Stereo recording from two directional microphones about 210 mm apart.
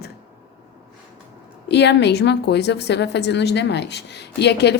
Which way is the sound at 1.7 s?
55° left (ahead or behind).